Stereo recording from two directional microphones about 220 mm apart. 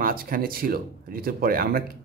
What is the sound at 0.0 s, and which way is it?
Speech, 40° right (ahead or behind).